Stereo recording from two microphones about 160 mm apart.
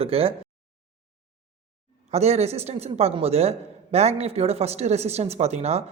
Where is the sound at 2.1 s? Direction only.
40° right (ahead or behind).